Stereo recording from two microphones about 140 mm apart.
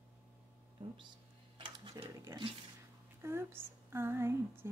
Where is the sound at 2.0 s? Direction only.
25° right (ahead or behind).